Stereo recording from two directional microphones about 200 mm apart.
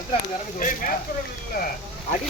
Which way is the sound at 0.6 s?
45° left (ahead or behind).